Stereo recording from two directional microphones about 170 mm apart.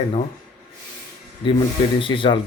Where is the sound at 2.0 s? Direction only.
30° left (ahead or behind).